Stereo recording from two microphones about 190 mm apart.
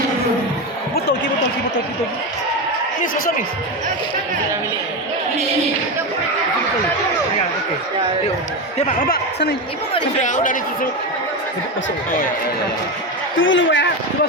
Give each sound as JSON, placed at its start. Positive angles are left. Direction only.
{"t": 0.9, "sound": "basketball bounce", "side_deg": 60}
{"t": 3.0, "sound": "speech", "side_deg": 45}
{"t": 9.9, "sound": "speech", "side_deg": 40}
{"t": 13.3, "sound": "a man's voice", "side_deg": 85}